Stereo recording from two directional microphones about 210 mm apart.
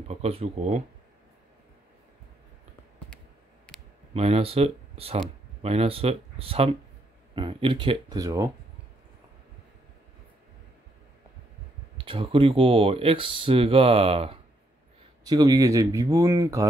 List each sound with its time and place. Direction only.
0.1 s speech: 30° right (ahead or behind)
4.1 s speech: 30° right (ahead or behind)
12.0 s speech: 25° right (ahead or behind)